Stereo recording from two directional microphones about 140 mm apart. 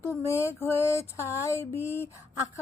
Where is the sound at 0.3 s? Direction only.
20° left (ahead or behind).